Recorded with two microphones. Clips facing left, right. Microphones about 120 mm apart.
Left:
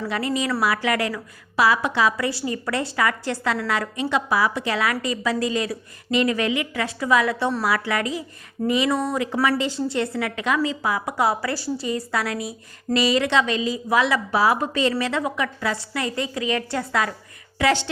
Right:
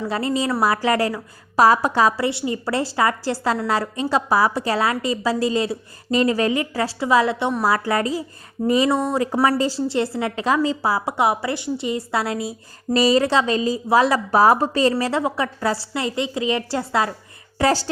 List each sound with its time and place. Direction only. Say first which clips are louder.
0.1 s a woman's voice: right 2 dB; 30° right (ahead or behind)
2.5 s a woman's voice: right 3 dB; 30° right (ahead or behind)
7.7 s a woman's voice: right 3 dB; 35° right (ahead or behind)
8.9 s a woman's voice: right 3 dB; 25° right (ahead or behind)
11.2 s a woman's voice: even; 25° right (ahead or behind)
17.6 s a woman's voice: right 2 dB; 40° right (ahead or behind)